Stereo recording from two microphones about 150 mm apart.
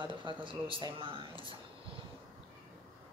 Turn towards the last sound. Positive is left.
turn(degrees=-35)  # may be behind; listen again after turning